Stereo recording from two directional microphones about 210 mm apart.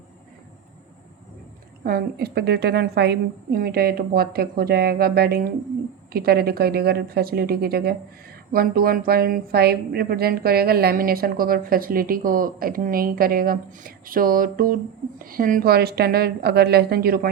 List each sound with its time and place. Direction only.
1.8 s a woman's voice: 45° right (ahead or behind)